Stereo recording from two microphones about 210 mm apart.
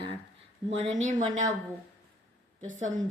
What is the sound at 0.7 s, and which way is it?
Speech, 30° right (ahead or behind).